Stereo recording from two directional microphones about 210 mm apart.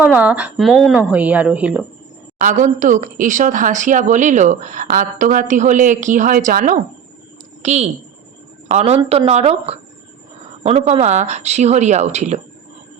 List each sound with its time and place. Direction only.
0.0 s a woman's voice: 5° right (ahead or behind)
2.4 s a woman's voice: 35° right (ahead or behind)